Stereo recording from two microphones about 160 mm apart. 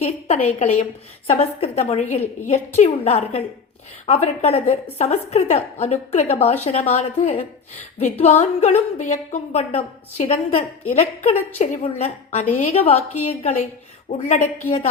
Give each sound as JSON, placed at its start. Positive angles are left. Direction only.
{"t": 0.3, "sound": "a woman's voice", "side_deg": 45}